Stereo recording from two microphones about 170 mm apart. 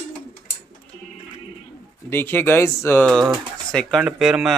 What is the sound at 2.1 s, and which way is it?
Speech, 15° left (ahead or behind).